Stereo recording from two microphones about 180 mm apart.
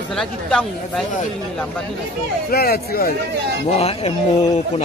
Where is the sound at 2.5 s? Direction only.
60° left (ahead or behind).